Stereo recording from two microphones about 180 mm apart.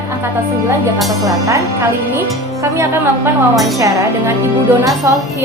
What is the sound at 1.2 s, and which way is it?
Speech, 15° right (ahead or behind).